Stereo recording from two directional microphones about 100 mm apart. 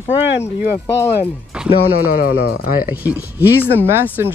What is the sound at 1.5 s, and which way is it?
Music, 10° right (ahead or behind).